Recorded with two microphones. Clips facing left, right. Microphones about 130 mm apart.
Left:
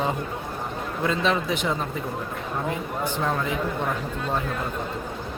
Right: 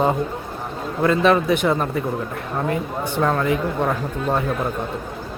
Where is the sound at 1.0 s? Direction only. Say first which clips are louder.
Right 8 dB; 60° right (ahead or behind).